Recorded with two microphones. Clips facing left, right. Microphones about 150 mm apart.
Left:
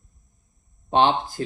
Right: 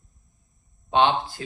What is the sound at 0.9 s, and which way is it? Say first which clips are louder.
Speech: left 1 dB; 45° left (ahead or behind).